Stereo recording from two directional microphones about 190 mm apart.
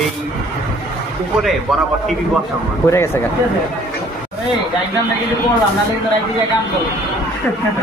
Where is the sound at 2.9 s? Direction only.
15° left (ahead or behind).